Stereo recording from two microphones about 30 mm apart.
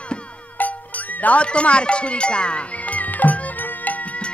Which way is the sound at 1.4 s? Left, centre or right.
Left.